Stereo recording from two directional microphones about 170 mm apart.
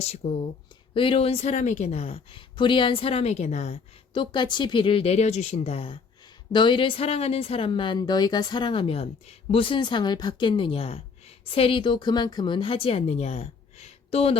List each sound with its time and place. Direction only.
0.2 s a woman's voice: 35° left (ahead or behind)
4.1 s a woman's voice: 30° left (ahead or behind)